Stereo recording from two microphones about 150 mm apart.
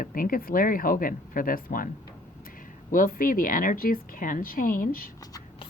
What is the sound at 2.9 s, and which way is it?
A woman's voice, 65° left (ahead or behind).